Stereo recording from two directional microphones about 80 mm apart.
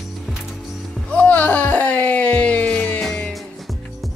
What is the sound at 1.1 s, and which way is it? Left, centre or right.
Music, centre.